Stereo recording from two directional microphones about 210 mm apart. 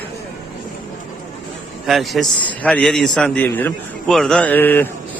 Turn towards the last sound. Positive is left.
turn(degrees=10)  # may be behind; listen again after turning